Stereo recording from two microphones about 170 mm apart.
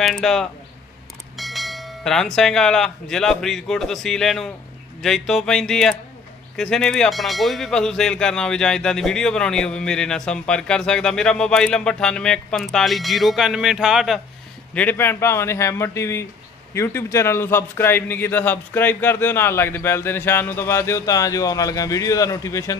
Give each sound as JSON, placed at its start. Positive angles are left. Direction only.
{"t": 0.0, "sound": "speech", "side_deg": 0}
{"t": 14.7, "sound": "a man's voice", "side_deg": 10}